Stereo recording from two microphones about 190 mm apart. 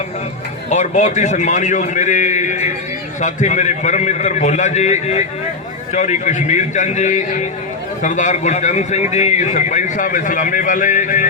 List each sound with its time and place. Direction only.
0.7 s a man's voice: 40° left (ahead or behind)